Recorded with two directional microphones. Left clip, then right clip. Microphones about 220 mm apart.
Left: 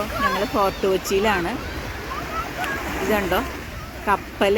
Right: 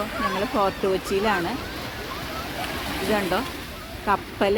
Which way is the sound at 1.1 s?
Centre (ahead or behind).